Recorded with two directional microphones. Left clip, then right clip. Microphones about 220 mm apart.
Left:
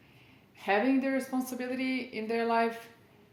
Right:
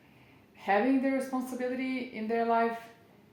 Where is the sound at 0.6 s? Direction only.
40° left (ahead or behind).